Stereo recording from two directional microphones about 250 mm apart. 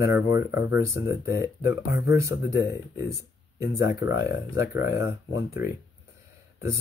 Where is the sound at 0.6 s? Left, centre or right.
Left.